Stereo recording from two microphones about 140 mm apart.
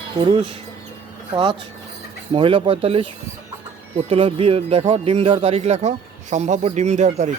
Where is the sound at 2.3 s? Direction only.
35° right (ahead or behind); by 7.3 s 55° right (ahead or behind).